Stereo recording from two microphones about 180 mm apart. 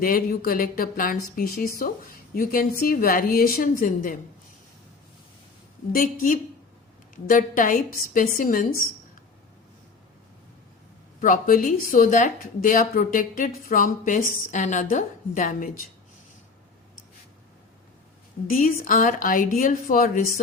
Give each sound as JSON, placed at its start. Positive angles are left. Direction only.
{"t": 0.0, "sound": "speech", "side_deg": 55}
{"t": 5.9, "sound": "speech", "side_deg": 50}
{"t": 11.2, "sound": "speech", "side_deg": 50}
{"t": 18.4, "sound": "speech", "side_deg": 50}